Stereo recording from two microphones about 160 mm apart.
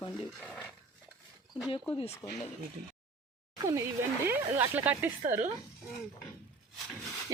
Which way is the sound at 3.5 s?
20° right (ahead or behind).